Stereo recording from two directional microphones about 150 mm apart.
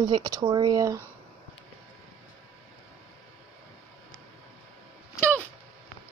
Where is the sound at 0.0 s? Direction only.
25° right (ahead or behind).